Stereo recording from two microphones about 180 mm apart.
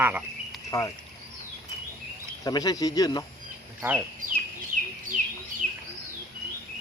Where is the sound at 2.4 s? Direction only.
20° left (ahead or behind).